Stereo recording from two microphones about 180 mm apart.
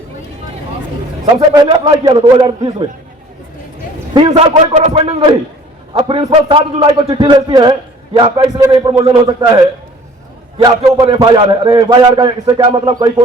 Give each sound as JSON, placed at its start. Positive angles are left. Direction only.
{"t": 1.2, "sound": "a man's voice", "side_deg": -30}
{"t": 4.3, "sound": "a man's voice", "side_deg": -30}
{"t": 10.6, "sound": "a man's voice", "side_deg": -20}